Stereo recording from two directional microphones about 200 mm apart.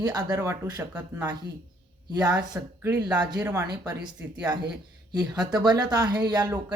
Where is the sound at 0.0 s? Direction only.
20° right (ahead or behind).